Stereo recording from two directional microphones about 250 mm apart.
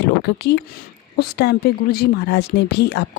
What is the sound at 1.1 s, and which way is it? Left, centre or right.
A woman's voice, left.